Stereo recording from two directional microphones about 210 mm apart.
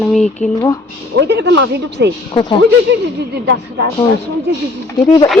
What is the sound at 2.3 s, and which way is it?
Speech, 20° left (ahead or behind).